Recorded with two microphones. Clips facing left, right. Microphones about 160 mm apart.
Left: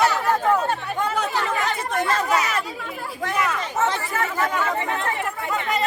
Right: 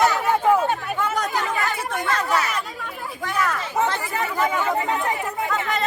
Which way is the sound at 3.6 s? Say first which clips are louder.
Even; 10° right (ahead or behind).